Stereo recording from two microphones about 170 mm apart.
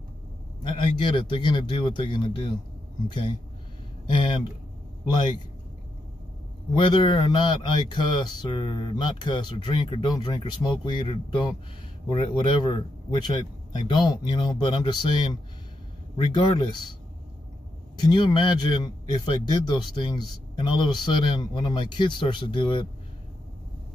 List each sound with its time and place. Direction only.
0.7 s speech: 30° left (ahead or behind)
6.8 s speech: 30° left (ahead or behind)
17.9 s speech: 25° left (ahead or behind)